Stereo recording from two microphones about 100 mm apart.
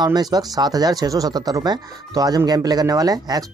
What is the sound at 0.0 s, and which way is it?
Speech, 40° right (ahead or behind).